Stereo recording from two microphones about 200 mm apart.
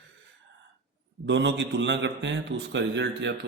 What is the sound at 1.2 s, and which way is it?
Speech, 65° right (ahead or behind).